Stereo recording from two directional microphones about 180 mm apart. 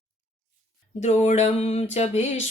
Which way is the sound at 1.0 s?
40° left (ahead or behind).